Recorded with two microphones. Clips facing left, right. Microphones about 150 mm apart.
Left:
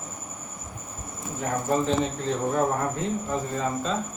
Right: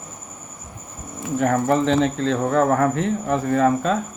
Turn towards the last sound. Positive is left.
turn(degrees=-65)  # may be behind; listen again after turning